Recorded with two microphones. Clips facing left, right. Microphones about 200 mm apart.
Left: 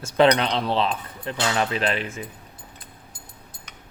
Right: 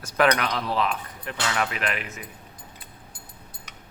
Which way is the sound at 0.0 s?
25° left (ahead or behind).